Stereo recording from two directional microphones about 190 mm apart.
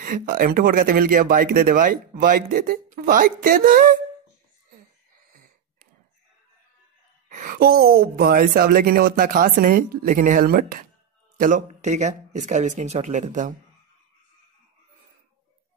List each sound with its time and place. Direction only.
0.0 s speech: 45° right (ahead or behind)
7.2 s speech: 45° right (ahead or behind)